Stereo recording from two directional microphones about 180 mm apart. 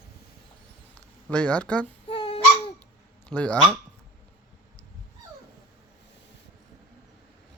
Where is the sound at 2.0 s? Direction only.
30° left (ahead or behind).